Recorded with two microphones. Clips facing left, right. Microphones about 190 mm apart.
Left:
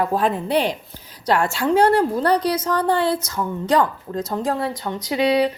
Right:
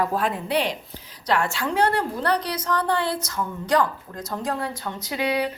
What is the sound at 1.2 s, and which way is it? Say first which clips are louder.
A woman's voice: left 4 dB; 35° left (ahead or behind).